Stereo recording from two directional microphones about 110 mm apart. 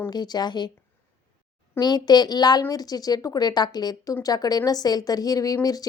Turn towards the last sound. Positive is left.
turn(degrees=35)  # may be behind; listen again after turning